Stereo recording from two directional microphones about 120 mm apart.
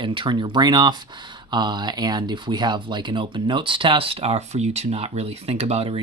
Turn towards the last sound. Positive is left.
turn(degrees=-55)  # may be behind; listen again after turning